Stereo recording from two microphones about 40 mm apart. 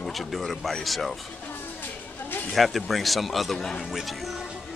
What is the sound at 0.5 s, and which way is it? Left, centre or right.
Speech, centre.